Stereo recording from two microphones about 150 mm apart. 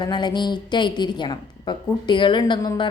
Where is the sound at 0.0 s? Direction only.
30° left (ahead or behind).